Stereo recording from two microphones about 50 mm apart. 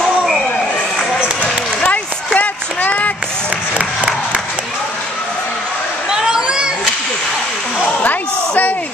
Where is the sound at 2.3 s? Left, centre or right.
Left.